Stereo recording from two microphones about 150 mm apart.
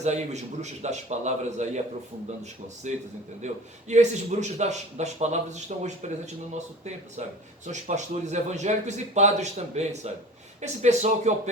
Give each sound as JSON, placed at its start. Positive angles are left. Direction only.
{"t": 0.0, "sound": "a man's voice", "side_deg": -50}
{"t": 3.4, "sound": "a man's voice", "side_deg": -50}